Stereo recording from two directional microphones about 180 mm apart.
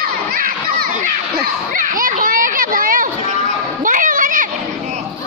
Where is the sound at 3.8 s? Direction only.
50° right (ahead or behind).